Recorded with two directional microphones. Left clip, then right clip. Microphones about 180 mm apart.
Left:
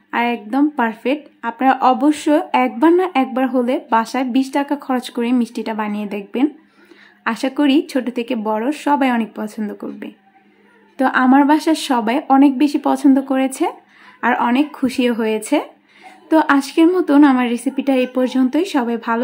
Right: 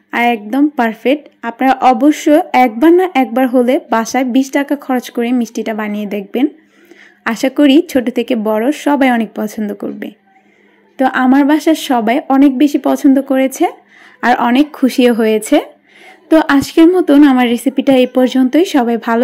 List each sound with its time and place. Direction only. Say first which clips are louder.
0.1 s a woman's voice: right 5 dB; 15° right (ahead or behind)